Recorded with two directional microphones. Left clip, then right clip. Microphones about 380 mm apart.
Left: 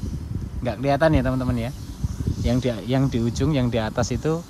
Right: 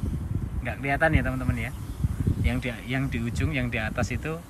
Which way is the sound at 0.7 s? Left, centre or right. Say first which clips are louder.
Left 5 dB; centre.